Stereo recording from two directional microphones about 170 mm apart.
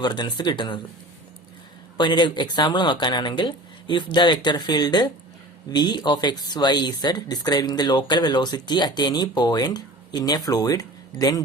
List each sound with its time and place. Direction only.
0.0 s speech: 25° left (ahead or behind)
2.0 s speech: 25° left (ahead or behind)